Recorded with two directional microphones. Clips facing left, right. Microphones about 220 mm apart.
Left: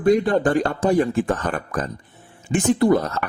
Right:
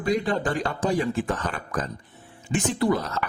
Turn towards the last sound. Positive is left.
turn(degrees=50)  # may be behind; listen again after turning